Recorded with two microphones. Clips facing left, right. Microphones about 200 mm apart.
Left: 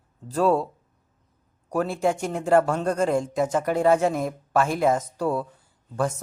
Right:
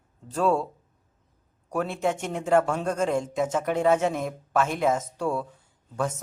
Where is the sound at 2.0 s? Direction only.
Centre (ahead or behind).